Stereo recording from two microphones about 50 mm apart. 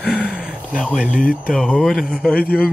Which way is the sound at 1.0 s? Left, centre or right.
Right.